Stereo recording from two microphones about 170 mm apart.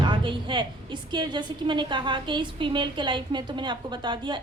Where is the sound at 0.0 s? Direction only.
30° right (ahead or behind).